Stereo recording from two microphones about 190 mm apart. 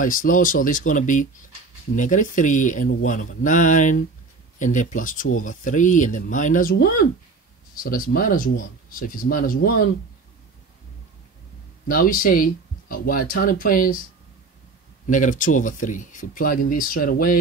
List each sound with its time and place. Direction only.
0.0 s speech: 45° left (ahead or behind)
11.9 s speech: 45° left (ahead or behind)
15.0 s speech: 40° left (ahead or behind)